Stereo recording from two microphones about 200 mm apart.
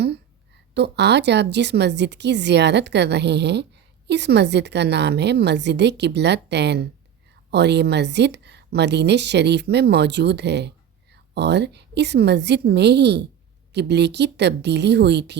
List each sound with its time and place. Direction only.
0.7 s speech: 55° right (ahead or behind)